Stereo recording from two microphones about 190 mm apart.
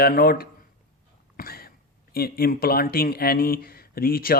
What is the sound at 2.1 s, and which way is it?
Speech, 50° left (ahead or behind).